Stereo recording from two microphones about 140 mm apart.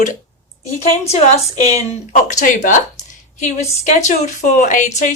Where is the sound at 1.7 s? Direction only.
60° left (ahead or behind).